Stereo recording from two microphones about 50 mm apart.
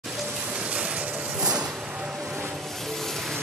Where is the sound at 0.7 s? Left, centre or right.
Right.